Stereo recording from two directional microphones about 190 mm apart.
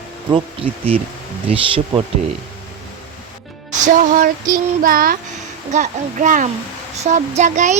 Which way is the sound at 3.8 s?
40° right (ahead or behind).